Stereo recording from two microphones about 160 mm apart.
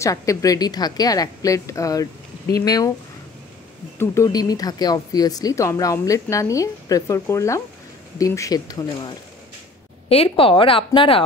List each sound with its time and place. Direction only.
0.0 s speech: 20° left (ahead or behind)
4.0 s speech: 20° left (ahead or behind)
10.0 s speech: 35° left (ahead or behind)